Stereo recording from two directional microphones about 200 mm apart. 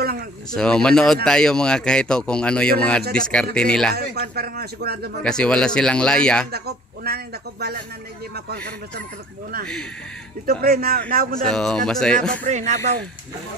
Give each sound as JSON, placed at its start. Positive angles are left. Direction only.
{"t": 0.6, "sound": "speech", "side_deg": 5}
{"t": 3.9, "sound": "a man's voice", "side_deg": -55}
{"t": 5.2, "sound": "speech", "side_deg": 5}
{"t": 6.5, "sound": "speech", "side_deg": -50}
{"t": 10.4, "sound": "a man's voice", "side_deg": -50}
{"t": 11.4, "sound": "speech", "side_deg": 5}
{"t": 12.4, "sound": "speech", "side_deg": -35}